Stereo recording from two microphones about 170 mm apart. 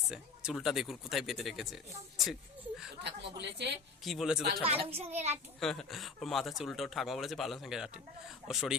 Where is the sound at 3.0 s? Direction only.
90° right.